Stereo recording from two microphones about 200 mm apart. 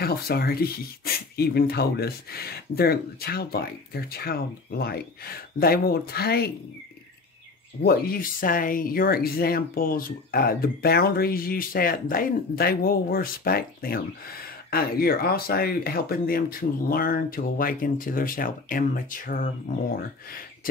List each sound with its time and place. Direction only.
0.0 s speech: 50° left (ahead or behind)
7.8 s speech: 50° left (ahead or behind)